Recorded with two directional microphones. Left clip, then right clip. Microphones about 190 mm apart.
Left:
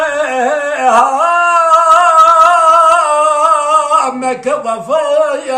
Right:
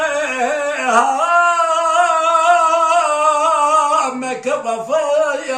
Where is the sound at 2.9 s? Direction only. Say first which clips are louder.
Left 4 dB; 60° left (ahead or behind).